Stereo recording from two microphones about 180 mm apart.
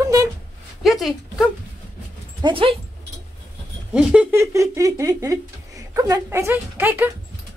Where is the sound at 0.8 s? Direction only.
Centre (ahead or behind).